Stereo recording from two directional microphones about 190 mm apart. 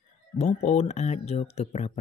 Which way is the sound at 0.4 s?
35° left (ahead or behind).